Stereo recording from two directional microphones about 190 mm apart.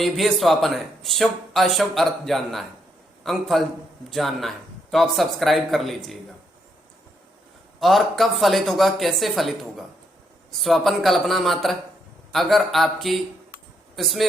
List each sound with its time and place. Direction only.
0.0 s speech: centre (ahead or behind)
7.8 s speech: centre (ahead or behind)